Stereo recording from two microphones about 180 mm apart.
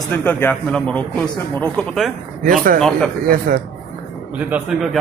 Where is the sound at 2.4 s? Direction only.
50° right (ahead or behind).